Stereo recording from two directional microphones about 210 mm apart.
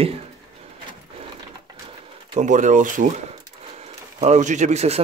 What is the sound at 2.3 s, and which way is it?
Speech, 35° right (ahead or behind).